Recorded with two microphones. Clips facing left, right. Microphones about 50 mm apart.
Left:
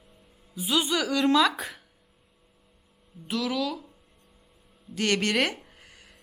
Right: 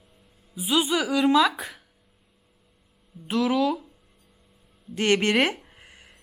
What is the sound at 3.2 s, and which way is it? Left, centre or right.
Speech, right.